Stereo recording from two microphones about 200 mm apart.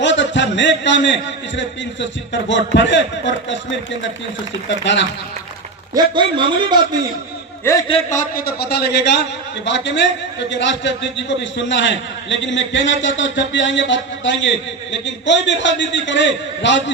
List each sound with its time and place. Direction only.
0.0 s a man's voice: 65° left (ahead or behind)
4.8 s a man's voice: 65° left (ahead or behind)
5.9 s a man's voice: 20° right (ahead or behind)
7.6 s a man's voice: 15° left (ahead or behind)
8.1 s a man's voice: 50° left (ahead or behind); by 16.9 s 65° left (ahead or behind)